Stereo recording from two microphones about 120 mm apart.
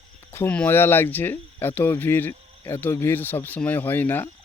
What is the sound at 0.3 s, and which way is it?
Speech, 15° left (ahead or behind).